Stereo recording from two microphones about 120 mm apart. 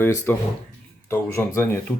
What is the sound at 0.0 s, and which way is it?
Speech, 20° left (ahead or behind).